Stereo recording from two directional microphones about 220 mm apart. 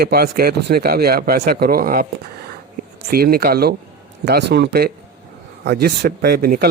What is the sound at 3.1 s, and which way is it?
Speech, 45° right (ahead or behind).